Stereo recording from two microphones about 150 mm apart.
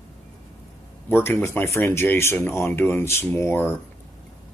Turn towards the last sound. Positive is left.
turn(degrees=15)  # may be behind; listen again after turning